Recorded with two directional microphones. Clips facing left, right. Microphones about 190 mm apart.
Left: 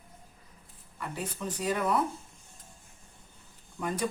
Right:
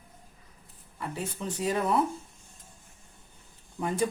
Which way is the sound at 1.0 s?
25° right (ahead or behind).